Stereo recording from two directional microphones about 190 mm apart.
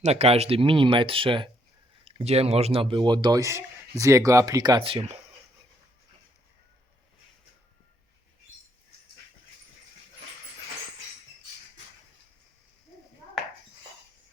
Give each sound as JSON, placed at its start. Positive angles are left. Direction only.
{"t": 0.0, "sound": "speech", "side_deg": -35}